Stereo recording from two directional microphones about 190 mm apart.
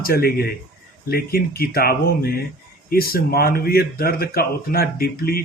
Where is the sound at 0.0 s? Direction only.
50° left (ahead or behind).